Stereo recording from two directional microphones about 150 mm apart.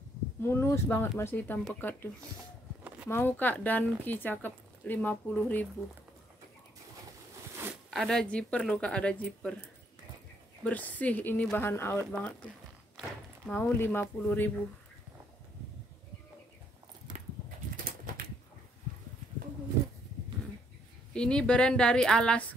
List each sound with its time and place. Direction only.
0.4 s speech: 15° left (ahead or behind)
3.1 s speech: 15° left (ahead or behind)
7.7 s speech: centre (ahead or behind)
13.5 s speech: 15° left (ahead or behind)
21.1 s speech: 5° left (ahead or behind)